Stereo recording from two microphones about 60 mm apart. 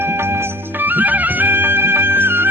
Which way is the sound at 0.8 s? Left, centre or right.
Right.